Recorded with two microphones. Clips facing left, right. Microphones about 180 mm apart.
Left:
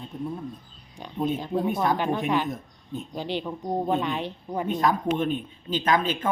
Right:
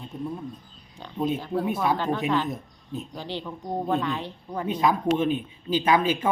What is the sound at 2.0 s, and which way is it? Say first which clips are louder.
Speech: even; 15° left (ahead or behind).